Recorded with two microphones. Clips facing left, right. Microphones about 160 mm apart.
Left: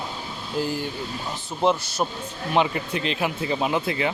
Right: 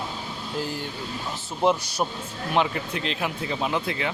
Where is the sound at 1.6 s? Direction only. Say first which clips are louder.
Even; 5° right (ahead or behind).